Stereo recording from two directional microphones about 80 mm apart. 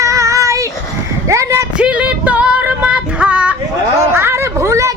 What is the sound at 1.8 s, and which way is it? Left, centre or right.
Female singing, centre.